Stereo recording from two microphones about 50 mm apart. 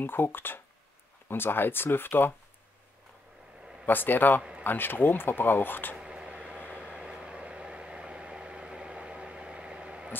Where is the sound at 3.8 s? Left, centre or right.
Left.